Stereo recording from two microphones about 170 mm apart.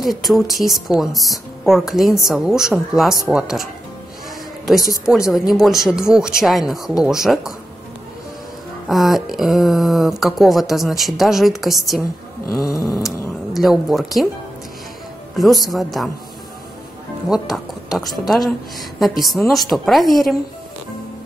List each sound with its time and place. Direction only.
0.0 s speech: centre (ahead or behind)
5.1 s speech: 5° right (ahead or behind)
8.8 s speech: centre (ahead or behind)
12.4 s cat: 20° left (ahead or behind)
13.0 s cat: centre (ahead or behind)
15.3 s speech: centre (ahead or behind)
17.3 s speech: centre (ahead or behind)